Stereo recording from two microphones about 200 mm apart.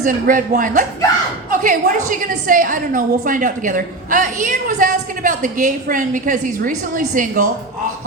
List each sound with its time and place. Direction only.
0.0 s a woman's voice: 45° right (ahead or behind)